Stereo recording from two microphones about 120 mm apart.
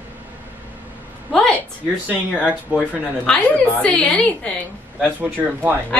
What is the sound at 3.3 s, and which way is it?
A woman's voice, 5° left (ahead or behind).